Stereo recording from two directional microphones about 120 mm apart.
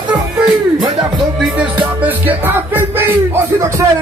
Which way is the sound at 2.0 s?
15° right (ahead or behind).